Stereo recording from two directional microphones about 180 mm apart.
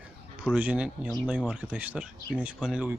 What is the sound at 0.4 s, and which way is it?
Speech, 5° right (ahead or behind).